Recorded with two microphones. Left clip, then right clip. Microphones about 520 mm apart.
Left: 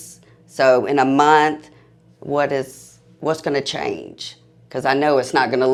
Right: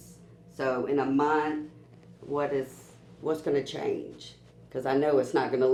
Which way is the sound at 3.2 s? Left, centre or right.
Left.